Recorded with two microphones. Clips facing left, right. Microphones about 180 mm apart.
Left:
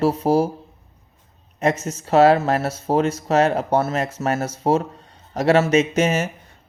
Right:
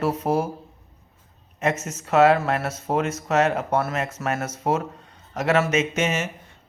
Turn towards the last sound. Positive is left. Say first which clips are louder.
# left 4 dB
turn(degrees=35)  # may be behind; listen again after turning